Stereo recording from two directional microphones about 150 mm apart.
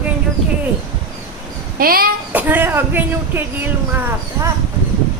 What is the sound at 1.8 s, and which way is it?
Speech, 75° right (ahead or behind).